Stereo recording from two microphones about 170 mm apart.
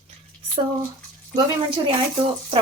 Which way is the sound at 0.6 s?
35° right (ahead or behind).